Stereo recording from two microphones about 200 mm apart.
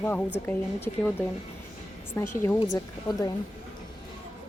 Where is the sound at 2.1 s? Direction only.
15° left (ahead or behind).